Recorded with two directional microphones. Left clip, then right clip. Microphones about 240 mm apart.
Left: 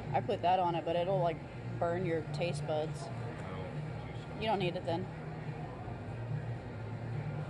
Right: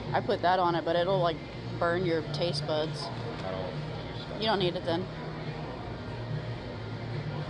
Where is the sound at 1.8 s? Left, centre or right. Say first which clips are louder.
Right 6 dB; centre.